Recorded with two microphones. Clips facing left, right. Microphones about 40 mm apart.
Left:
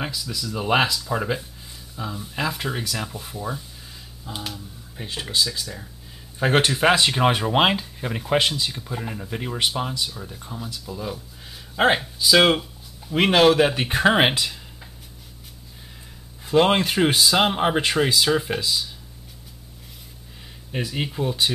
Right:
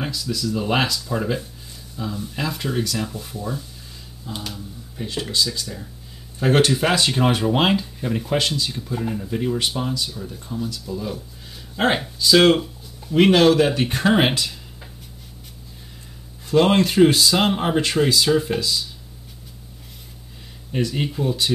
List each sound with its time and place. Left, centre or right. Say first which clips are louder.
0.0 s speech: right 4 dB; centre
12.2 s a sound: right 4 dB; centre
13.2 s speech: right 2 dB; centre
16.4 s speech: right 1 dB; centre
20.7 s speech: right 4 dB; centre